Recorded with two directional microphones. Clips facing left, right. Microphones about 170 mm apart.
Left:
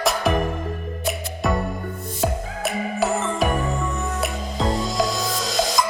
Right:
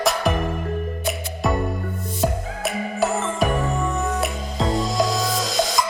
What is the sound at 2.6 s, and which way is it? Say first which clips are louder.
Music: even; centre (ahead or behind).